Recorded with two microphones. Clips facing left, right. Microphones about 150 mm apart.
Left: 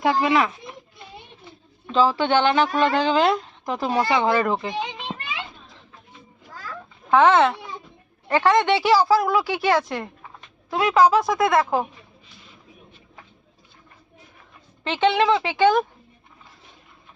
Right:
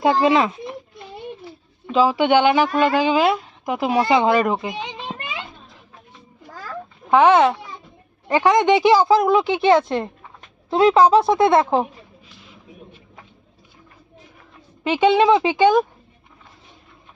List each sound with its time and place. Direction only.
0.0 s speech: 25° right (ahead or behind)
1.9 s speech: 10° right (ahead or behind)
7.1 s speech: 15° right (ahead or behind)
14.8 s speech: 10° right (ahead or behind)